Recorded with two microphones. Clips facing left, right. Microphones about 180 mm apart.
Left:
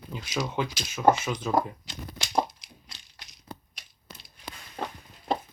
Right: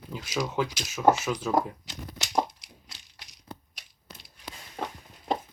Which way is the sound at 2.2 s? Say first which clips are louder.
Even; 15° right (ahead or behind).